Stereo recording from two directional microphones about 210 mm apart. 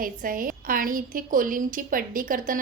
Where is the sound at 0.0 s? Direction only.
40° right (ahead or behind).